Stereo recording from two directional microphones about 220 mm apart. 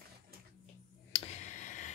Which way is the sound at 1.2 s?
35° left (ahead or behind).